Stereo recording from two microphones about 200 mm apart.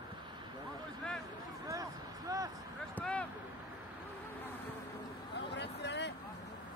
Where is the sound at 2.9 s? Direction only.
5° left (ahead or behind).